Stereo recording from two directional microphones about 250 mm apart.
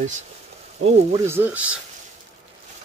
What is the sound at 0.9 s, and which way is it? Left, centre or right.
Speech, centre.